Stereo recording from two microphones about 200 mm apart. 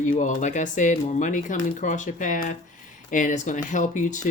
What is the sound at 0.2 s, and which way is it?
Speech, 40° left (ahead or behind).